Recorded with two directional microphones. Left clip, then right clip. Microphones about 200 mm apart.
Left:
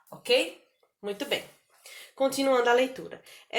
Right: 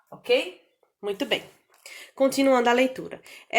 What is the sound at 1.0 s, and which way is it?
Speech, 50° right (ahead or behind).